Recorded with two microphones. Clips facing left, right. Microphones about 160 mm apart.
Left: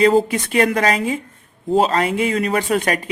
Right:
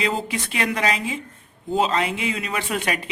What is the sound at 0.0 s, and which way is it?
Speech, 40° left (ahead or behind).